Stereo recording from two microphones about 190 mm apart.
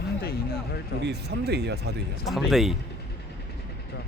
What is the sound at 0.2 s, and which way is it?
Speech, 55° left (ahead or behind).